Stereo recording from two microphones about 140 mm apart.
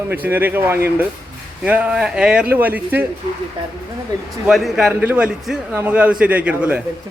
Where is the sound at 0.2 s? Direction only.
15° right (ahead or behind).